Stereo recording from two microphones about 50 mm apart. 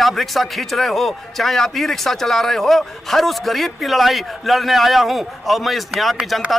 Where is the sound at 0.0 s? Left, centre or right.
Centre.